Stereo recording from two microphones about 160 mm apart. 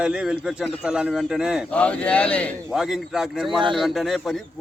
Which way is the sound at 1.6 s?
10° left (ahead or behind).